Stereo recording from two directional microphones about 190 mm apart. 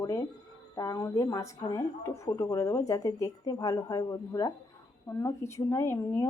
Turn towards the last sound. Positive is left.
turn(degrees=15)  # may be behind; listen again after turning